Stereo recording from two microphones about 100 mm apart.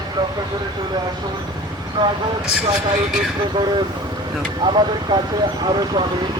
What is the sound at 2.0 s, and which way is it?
Speech, 50° right (ahead or behind).